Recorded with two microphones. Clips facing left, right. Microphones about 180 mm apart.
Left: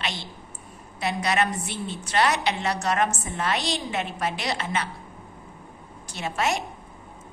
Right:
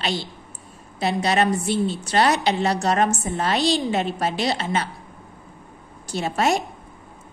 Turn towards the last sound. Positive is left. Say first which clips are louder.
# right 5 dB
turn(degrees=-35)  # may be behind; listen again after turning